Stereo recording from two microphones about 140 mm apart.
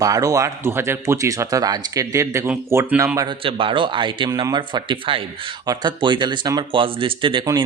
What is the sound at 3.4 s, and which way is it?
Speech, 40° right (ahead or behind).